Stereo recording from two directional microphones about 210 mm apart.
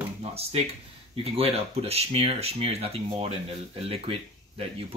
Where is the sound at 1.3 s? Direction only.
30° right (ahead or behind).